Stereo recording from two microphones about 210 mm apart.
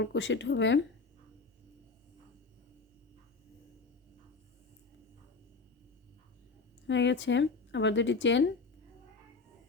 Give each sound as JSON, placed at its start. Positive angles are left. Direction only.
{"t": 0.0, "sound": "speech", "side_deg": 60}
{"t": 6.8, "sound": "speech", "side_deg": 60}